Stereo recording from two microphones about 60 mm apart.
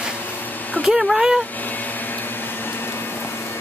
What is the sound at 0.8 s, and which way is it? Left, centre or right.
Speech, centre.